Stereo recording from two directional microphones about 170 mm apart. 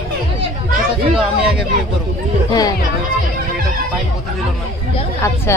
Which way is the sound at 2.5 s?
20° left (ahead or behind).